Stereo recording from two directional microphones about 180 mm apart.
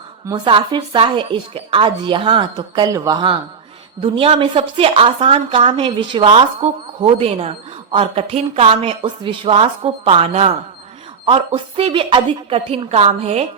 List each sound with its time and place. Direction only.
0.3 s a woman's voice: 25° right (ahead or behind)